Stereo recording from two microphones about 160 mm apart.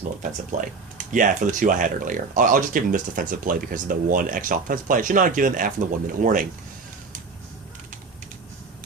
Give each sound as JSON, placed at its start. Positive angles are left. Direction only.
{"t": 0.2, "sound": "speech", "side_deg": -55}